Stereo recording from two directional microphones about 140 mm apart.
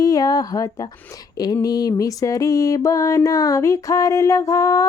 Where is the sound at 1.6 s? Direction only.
25° left (ahead or behind).